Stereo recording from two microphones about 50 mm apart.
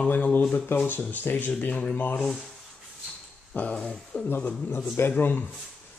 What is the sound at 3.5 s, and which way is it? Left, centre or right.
Speech, left.